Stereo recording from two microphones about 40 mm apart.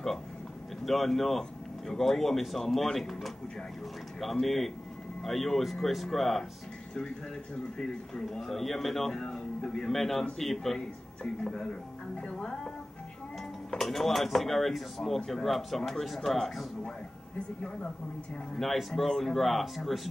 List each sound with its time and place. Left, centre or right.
0.8 s speech: centre
7.8 s speech: centre
12.2 s music: centre
13.7 s speech: centre
18.6 s speech: centre